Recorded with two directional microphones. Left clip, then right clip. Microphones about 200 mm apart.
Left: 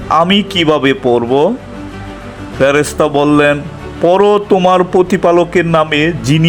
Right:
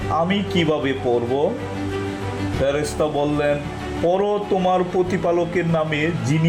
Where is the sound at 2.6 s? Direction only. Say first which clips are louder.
Left 11 dB; 35° left (ahead or behind).